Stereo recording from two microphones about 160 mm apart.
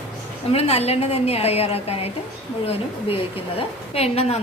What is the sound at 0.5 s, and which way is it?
A woman's voice, 40° left (ahead or behind).